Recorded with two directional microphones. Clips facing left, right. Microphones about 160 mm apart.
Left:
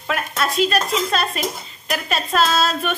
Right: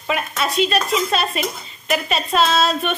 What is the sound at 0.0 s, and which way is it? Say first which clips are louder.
A woman's voice: right 1 dB; 5° right (ahead or behind).